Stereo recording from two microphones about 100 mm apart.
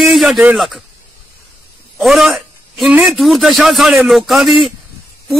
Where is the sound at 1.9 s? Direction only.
Centre (ahead or behind).